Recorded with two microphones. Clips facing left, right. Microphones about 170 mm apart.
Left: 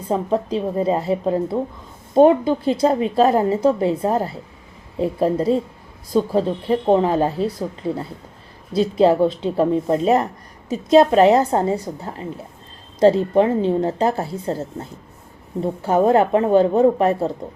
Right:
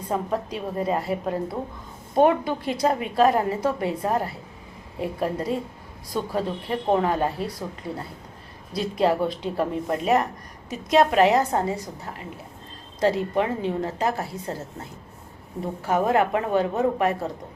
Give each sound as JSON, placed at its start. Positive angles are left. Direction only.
{"t": 0.1, "sound": "a woman's voice", "side_deg": 30}
{"t": 8.7, "sound": "a woman's voice", "side_deg": 30}